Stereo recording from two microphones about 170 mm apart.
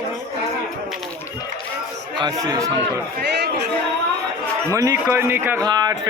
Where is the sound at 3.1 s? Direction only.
75° right (ahead or behind).